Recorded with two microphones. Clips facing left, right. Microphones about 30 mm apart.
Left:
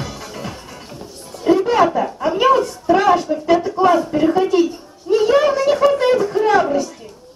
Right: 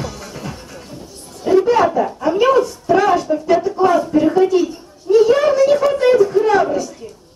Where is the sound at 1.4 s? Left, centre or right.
Centre.